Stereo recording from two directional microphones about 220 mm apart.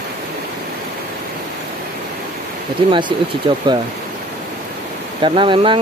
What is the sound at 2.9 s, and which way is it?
Speech, 20° right (ahead or behind).